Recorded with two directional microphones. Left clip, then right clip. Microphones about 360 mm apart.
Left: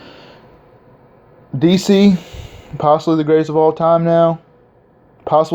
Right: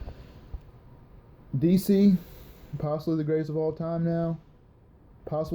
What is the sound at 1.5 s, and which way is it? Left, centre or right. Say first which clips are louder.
Speech: left 12 dB; centre.